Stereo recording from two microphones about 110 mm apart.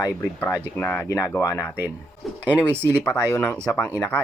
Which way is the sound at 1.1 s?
25° left (ahead or behind).